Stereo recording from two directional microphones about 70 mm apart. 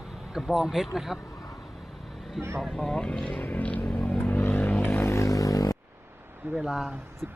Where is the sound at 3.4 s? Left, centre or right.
Left.